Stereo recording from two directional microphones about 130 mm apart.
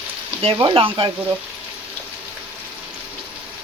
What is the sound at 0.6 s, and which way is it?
Speech, 45° right (ahead or behind).